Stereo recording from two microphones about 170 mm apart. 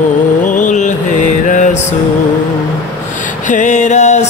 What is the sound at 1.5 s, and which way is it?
Music, 45° left (ahead or behind).